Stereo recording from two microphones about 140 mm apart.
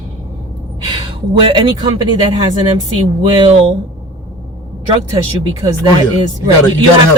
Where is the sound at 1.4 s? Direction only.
35° right (ahead or behind).